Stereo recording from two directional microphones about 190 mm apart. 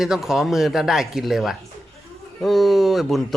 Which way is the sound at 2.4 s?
Centre (ahead or behind).